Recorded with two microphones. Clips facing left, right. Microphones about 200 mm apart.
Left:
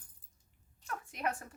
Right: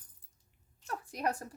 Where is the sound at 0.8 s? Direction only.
40° right (ahead or behind).